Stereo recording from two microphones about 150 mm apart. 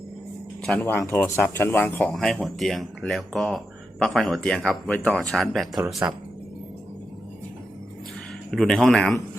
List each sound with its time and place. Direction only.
0.8 s speech: 20° left (ahead or behind); by 5.8 s centre (ahead or behind)
6.0 s speech: 10° right (ahead or behind)
8.4 s speech: 5° left (ahead or behind)